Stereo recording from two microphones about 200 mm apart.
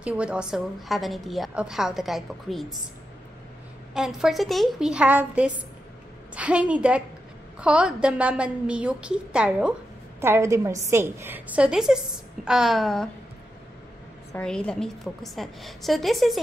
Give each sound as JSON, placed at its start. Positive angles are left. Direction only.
{"t": 0.0, "sound": "a woman's voice", "side_deg": -5}
{"t": 3.9, "sound": "a woman's voice", "side_deg": -5}
{"t": 14.3, "sound": "a woman's voice", "side_deg": 5}